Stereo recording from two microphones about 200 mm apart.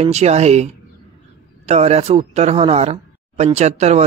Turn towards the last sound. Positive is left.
turn(degrees=-35)  # may be behind; listen again after turning